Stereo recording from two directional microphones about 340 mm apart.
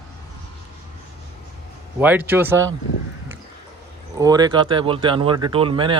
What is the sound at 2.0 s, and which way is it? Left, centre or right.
Speech, centre.